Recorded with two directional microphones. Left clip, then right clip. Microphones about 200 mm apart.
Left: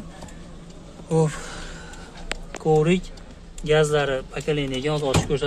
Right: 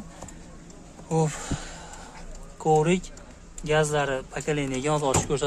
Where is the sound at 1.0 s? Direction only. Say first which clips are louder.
Left 4 dB; 10° right (ahead or behind).